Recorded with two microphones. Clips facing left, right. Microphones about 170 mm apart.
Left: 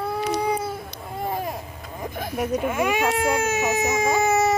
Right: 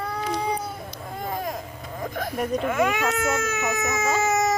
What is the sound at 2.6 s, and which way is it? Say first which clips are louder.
Speech: even; 15° left (ahead or behind).